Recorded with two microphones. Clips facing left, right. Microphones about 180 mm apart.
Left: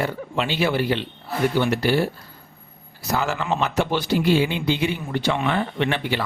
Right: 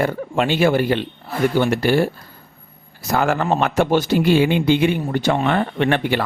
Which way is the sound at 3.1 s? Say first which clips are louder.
Right 5 dB; 55° right (ahead or behind).